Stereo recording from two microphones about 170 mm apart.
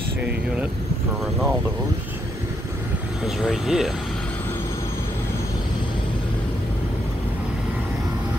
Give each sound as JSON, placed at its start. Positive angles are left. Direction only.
{"t": 3.3, "sound": "speech", "side_deg": 0}